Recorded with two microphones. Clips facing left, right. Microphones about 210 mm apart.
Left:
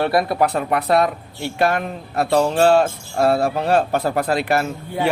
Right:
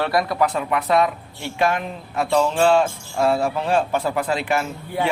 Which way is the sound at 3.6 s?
60° left (ahead or behind).